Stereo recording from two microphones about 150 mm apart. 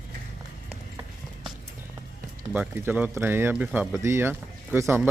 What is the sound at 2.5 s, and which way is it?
Speech, 10° right (ahead or behind).